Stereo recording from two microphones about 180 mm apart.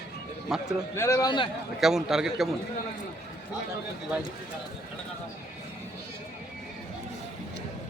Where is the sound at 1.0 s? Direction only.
15° left (ahead or behind).